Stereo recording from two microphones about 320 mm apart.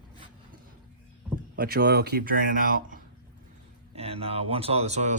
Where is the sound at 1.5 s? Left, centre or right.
Right.